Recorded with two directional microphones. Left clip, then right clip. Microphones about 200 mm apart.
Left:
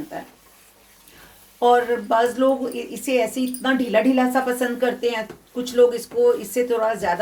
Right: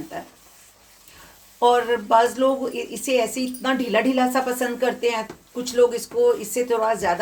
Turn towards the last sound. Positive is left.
turn(degrees=-5)  # may be behind; listen again after turning